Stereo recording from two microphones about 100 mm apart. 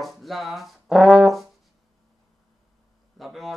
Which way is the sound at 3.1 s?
Centre (ahead or behind).